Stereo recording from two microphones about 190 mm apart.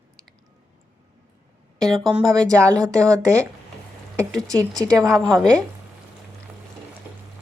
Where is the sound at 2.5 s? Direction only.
15° right (ahead or behind).